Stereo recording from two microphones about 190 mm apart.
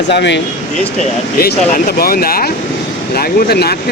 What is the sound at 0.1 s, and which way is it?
Speech, 65° left (ahead or behind).